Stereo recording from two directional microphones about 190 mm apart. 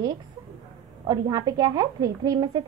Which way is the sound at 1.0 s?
20° right (ahead or behind).